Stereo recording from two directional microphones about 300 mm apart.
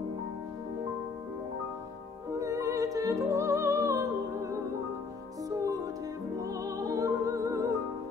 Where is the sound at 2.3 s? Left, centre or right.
Centre.